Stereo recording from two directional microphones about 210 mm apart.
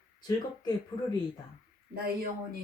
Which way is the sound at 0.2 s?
20° left (ahead or behind).